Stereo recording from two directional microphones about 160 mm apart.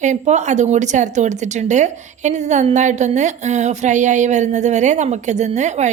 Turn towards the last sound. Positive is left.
turn(degrees=-45)  # may be behind; listen again after turning